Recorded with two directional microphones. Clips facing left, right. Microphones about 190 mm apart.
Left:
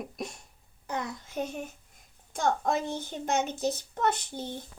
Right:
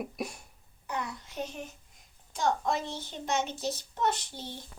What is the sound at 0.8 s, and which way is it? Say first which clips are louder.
A child's voice: left 2 dB; 45° left (ahead or behind).